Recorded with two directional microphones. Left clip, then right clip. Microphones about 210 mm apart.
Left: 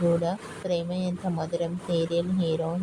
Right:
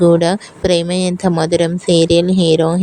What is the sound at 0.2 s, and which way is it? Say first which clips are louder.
Speech: right 14 dB; 40° right (ahead or behind).